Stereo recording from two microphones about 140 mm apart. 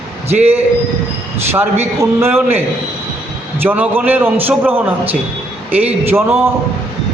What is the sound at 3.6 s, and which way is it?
A man's voice, 15° right (ahead or behind).